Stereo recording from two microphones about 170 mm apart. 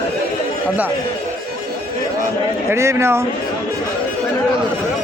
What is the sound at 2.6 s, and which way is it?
Speech, 15° right (ahead or behind).